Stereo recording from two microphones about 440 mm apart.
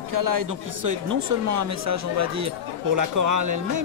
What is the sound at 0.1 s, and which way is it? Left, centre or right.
A man's voice, right.